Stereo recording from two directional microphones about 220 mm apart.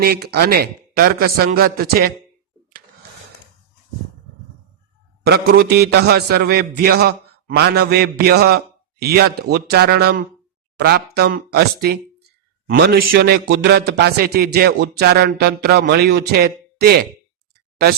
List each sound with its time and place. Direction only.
0.0 s a man's voice: 45° right (ahead or behind)
5.2 s a man's voice: 45° right (ahead or behind)